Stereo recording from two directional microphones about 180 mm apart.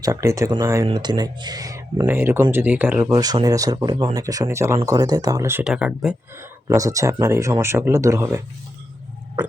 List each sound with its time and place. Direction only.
0.0 s speech: 20° right (ahead or behind)
3.1 s speech: 20° right (ahead or behind); by 6.1 s 5° right (ahead or behind)
6.7 s speech: 20° right (ahead or behind)